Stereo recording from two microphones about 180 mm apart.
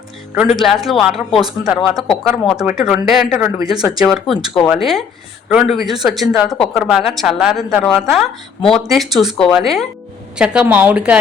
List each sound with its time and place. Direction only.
0.3 s speech: centre (ahead or behind)
3.3 s a woman's voice: 15° right (ahead or behind)
3.8 s a woman's voice: centre (ahead or behind)